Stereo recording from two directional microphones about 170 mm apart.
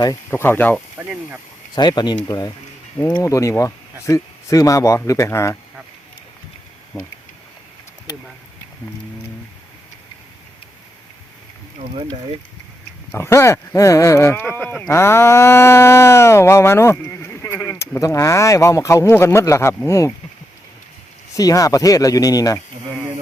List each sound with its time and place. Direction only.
0.0 s speech: 20° left (ahead or behind)
0.9 s speech: 5° right (ahead or behind)
1.7 s speech: 25° left (ahead or behind)
6.9 s speech: 20° left (ahead or behind)
13.1 s speech: 15° left (ahead or behind)
21.3 s speech: 20° left (ahead or behind)